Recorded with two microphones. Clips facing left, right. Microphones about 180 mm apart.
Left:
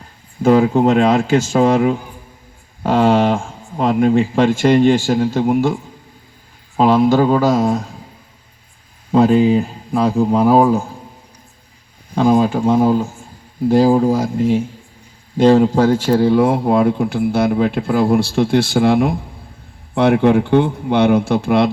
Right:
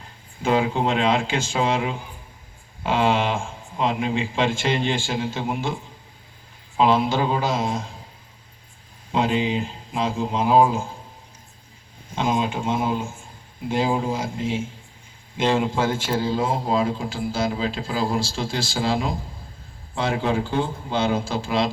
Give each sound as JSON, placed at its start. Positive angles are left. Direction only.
{"t": 0.4, "sound": "speech", "side_deg": 40}
{"t": 6.7, "sound": "speech", "side_deg": 45}
{"t": 9.1, "sound": "speech", "side_deg": 45}
{"t": 12.1, "sound": "speech", "side_deg": 40}
{"t": 16.1, "sound": "speech", "side_deg": 65}